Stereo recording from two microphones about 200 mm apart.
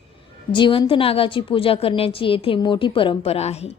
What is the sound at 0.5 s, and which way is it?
A woman's voice, 25° left (ahead or behind).